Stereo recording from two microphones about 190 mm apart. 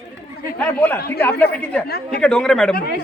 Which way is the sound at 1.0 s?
55° left (ahead or behind).